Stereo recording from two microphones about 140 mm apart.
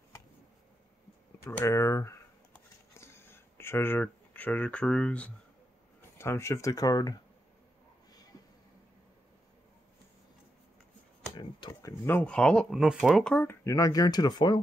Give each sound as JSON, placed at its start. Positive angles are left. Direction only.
{"t": 1.4, "sound": "a sound", "side_deg": 20}
{"t": 6.1, "sound": "speech", "side_deg": 20}
{"t": 11.3, "sound": "a sound", "side_deg": 30}
{"t": 12.1, "sound": "speech", "side_deg": 10}
{"t": 13.3, "sound": "speech", "side_deg": 10}
{"t": 13.7, "sound": "speech", "side_deg": 25}